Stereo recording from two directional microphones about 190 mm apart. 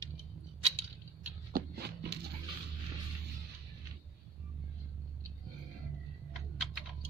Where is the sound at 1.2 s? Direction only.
55° right (ahead or behind).